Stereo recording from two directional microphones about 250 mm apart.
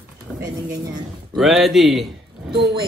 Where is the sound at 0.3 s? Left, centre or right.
Centre.